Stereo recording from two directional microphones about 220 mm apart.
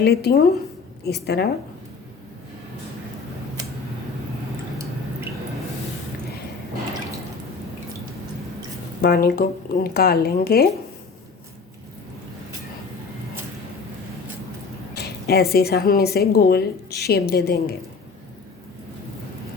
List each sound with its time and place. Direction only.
0.0 s speech: 45° left (ahead or behind)
9.0 s speech: 45° left (ahead or behind)
14.9 s speech: 45° left (ahead or behind)